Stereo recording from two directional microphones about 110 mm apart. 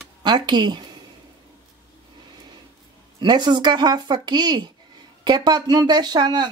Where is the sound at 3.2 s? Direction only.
40° right (ahead or behind).